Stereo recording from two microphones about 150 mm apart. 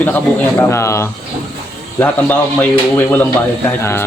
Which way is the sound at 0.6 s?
20° left (ahead or behind).